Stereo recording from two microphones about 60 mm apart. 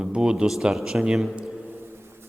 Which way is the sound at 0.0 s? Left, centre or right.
Centre.